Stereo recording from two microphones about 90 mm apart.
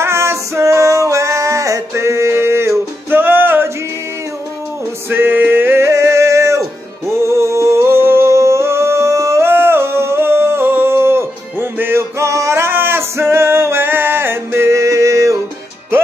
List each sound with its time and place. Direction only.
0.0 s music: 30° right (ahead or behind)
5.1 s music: 20° right (ahead or behind)
7.1 s singing: 30° right (ahead or behind)
11.8 s music: 30° right (ahead or behind)